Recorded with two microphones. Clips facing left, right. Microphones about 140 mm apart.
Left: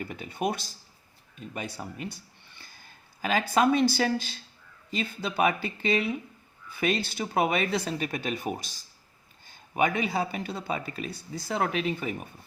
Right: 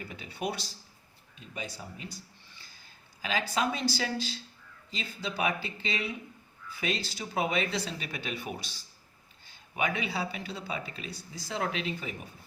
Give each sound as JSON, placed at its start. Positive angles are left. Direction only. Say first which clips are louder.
{"t": 0.1, "sound": "speech", "louder": "left 4 dB", "side_deg": 50}